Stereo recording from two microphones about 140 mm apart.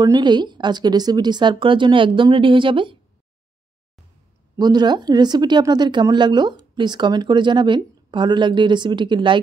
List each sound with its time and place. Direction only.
0.0 s speech: 30° right (ahead or behind)
4.6 s speech: 30° right (ahead or behind)